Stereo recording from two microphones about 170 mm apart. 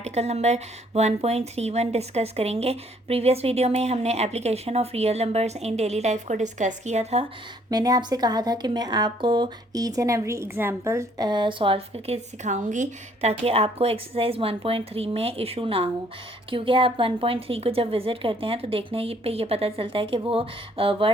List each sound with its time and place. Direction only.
0.0 s speech: 40° right (ahead or behind)
7.7 s a woman's voice: 20° right (ahead or behind)